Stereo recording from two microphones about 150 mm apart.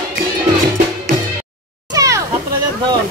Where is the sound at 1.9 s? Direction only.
20° right (ahead or behind).